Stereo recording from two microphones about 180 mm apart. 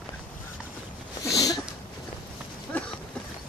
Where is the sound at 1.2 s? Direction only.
20° left (ahead or behind).